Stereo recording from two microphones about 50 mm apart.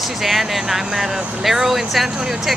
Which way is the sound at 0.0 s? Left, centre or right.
Centre.